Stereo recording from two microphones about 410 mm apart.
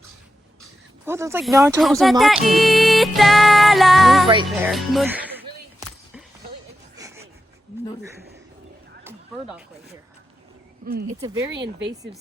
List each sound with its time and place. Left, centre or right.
1.0 s speech: centre
6.9 s a sound: centre
10.8 s speech: right
11.2 s speech: centre